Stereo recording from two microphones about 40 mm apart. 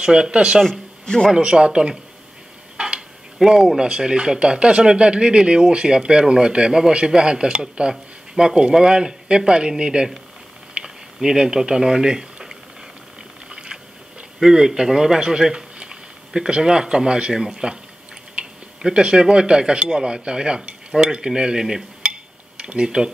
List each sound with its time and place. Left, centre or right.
0.0 s speech: right
1.0 s speech: centre
1.3 s speech: right
3.3 s speech: centre
10.7 s a sound: centre
13.5 s biting: right
14.4 s speech: centre
17.3 s speech: centre